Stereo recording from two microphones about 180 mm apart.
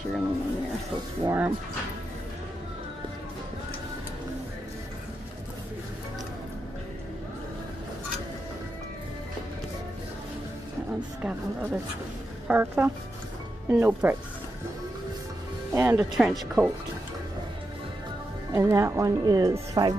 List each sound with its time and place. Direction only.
1.2 s speech: 15° right (ahead or behind)
11.2 s speech: 10° right (ahead or behind)
15.7 s speech: 10° right (ahead or behind)
18.5 s speech: 15° right (ahead or behind)